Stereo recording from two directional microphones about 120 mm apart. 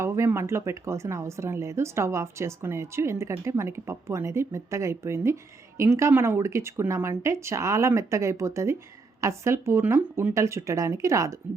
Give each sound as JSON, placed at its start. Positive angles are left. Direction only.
{"t": 0.0, "sound": "speech", "side_deg": -25}